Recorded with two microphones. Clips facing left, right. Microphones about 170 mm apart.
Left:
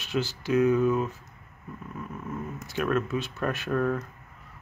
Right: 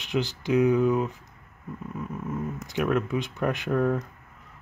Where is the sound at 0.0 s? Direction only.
15° right (ahead or behind).